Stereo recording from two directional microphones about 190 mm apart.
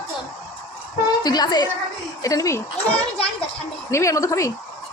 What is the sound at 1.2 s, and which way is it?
A woman's voice, 20° left (ahead or behind).